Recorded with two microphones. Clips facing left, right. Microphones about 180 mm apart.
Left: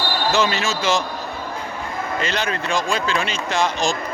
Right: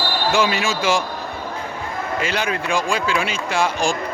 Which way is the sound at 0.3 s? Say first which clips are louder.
Right 1 dB; 10° right (ahead or behind).